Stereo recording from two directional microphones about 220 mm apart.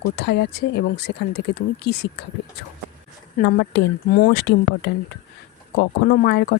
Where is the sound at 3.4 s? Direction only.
50° left (ahead or behind).